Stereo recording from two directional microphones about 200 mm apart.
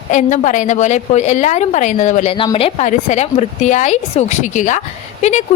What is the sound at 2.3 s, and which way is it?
A woman's voice, 25° left (ahead or behind).